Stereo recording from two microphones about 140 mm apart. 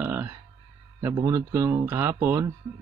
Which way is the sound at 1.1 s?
25° right (ahead or behind).